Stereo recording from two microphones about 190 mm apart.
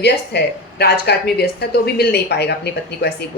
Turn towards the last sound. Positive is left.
turn(degrees=60)  # may be behind; listen again after turning